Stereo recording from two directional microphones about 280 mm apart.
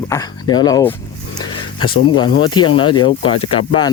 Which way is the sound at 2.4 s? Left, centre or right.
Centre.